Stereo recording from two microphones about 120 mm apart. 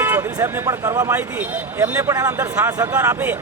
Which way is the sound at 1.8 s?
25° right (ahead or behind).